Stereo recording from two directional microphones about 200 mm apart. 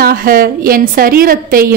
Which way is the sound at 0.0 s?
45° right (ahead or behind).